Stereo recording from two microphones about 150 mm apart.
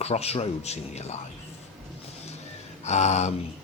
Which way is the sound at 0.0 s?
45° left (ahead or behind).